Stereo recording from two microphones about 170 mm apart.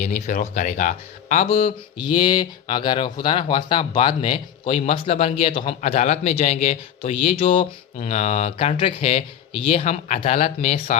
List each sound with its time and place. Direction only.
0.0 s speech: 45° left (ahead or behind)